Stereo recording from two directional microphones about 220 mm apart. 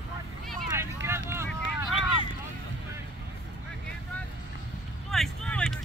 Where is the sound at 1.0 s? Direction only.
10° right (ahead or behind).